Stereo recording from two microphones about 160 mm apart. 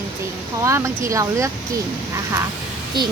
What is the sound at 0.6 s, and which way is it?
Speech, 20° right (ahead or behind).